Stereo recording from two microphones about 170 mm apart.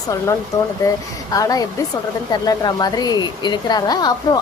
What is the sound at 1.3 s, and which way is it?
A woman's voice, 20° left (ahead or behind).